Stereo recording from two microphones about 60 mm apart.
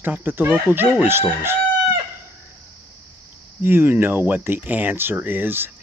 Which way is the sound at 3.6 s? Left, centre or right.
Right.